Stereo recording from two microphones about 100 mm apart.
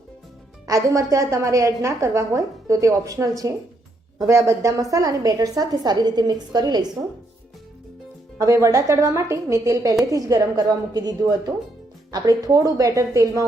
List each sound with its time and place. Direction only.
0.7 s a woman's voice: 30° right (ahead or behind)
8.4 s a woman's voice: 35° right (ahead or behind)